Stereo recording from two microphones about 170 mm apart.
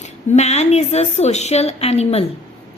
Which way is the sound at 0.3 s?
40° left (ahead or behind).